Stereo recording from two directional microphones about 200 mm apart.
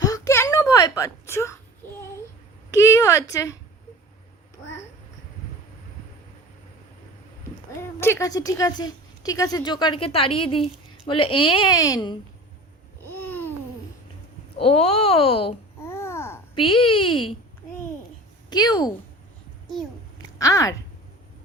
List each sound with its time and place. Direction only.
0.0 s a sound: 15° left (ahead or behind)
2.6 s a woman's voice: 15° left (ahead or behind)
7.8 s a woman's voice: 15° left (ahead or behind)
13.0 s babbling: 10° left (ahead or behind)
14.6 s a woman's voice: 30° left (ahead or behind)
15.8 s babbling: 15° left (ahead or behind)
16.6 s a woman's voice: 25° left (ahead or behind)
18.5 s a woman's voice: 20° left (ahead or behind)
20.4 s a woman's voice: 15° left (ahead or behind)